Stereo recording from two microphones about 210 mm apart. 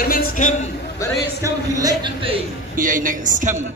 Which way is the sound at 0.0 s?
40° left (ahead or behind).